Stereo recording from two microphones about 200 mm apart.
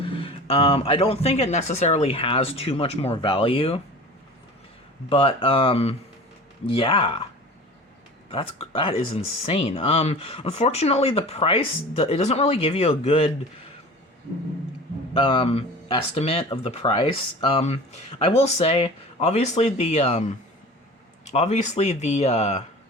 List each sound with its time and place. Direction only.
0.0 s speech: 25° left (ahead or behind)
5.0 s speech: 25° left (ahead or behind)
8.3 s speech: 30° left (ahead or behind)
15.1 s speech: 25° left (ahead or behind)